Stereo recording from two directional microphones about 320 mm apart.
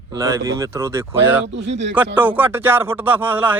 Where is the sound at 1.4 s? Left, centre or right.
Right.